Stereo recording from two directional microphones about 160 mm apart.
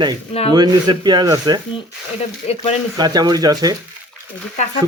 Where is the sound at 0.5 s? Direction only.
25° right (ahead or behind).